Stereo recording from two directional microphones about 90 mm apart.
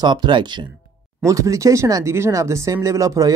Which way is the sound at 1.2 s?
40° right (ahead or behind).